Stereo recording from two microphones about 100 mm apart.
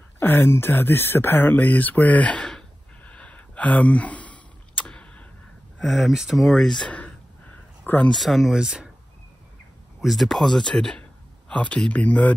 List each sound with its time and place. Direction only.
0.2 s a sound: 20° left (ahead or behind)
5.8 s speech: centre (ahead or behind)
7.8 s speech: 20° left (ahead or behind)
8.1 s speech: centre (ahead or behind)
9.9 s speech: centre (ahead or behind)